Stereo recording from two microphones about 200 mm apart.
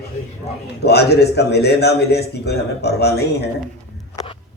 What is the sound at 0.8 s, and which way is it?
A man's voice, 55° left (ahead or behind).